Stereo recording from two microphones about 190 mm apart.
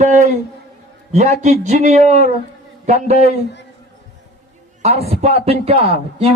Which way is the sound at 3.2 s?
65° left (ahead or behind).